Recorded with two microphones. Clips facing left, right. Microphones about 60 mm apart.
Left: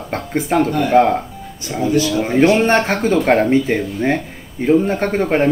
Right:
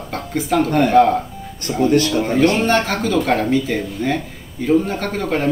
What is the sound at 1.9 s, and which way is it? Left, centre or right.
Speech, right.